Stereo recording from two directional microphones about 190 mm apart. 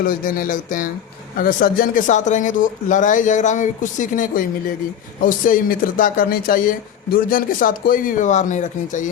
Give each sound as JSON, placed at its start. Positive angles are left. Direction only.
{"t": 0.0, "sound": "speech", "side_deg": 50}